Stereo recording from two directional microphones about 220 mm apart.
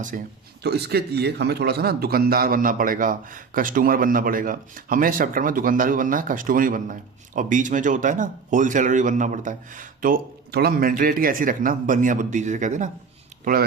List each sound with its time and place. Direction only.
0.1 s a man's voice: 40° right (ahead or behind)